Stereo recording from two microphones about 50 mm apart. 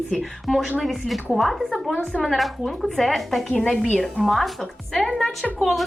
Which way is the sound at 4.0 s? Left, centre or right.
Centre.